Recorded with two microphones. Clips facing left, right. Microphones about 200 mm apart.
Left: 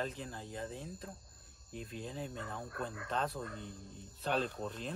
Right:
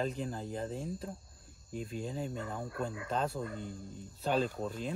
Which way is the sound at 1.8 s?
Centre (ahead or behind).